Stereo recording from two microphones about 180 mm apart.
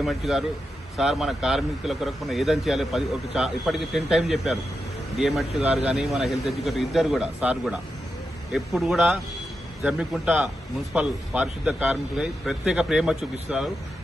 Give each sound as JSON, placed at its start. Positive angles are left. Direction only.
{"t": 0.0, "sound": "a man's voice", "side_deg": 0}